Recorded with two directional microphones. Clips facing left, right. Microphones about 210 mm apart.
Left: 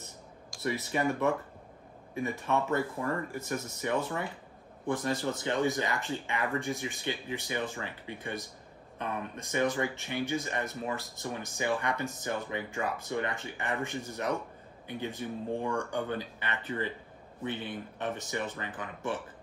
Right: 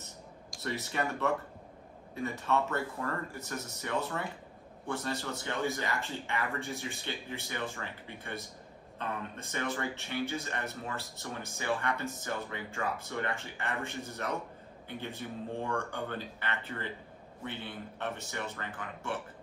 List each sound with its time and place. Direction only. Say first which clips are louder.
0.6 s speech: left 3 dB; 15° left (ahead or behind)